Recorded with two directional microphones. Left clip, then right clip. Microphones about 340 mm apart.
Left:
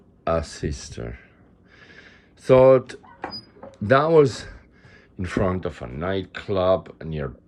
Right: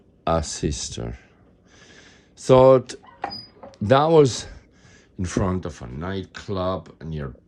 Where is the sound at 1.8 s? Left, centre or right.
Centre.